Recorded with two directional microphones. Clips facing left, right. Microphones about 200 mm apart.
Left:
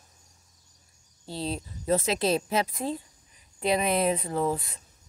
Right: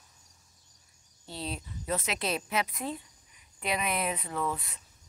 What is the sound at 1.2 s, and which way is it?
Speech, 35° left (ahead or behind).